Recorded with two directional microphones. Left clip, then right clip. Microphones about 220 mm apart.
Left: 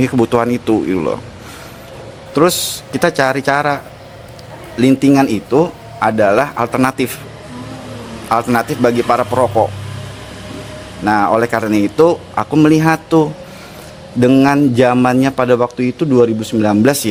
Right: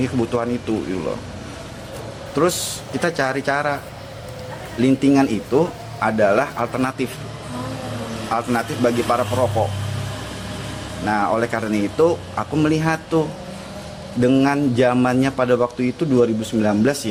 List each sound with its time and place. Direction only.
0.0 s a man's voice: 50° left (ahead or behind)
2.3 s a man's voice: 45° left (ahead or behind)
4.8 s a man's voice: 50° left (ahead or behind)
8.3 s a man's voice: 50° left (ahead or behind)
11.0 s a man's voice: 50° left (ahead or behind)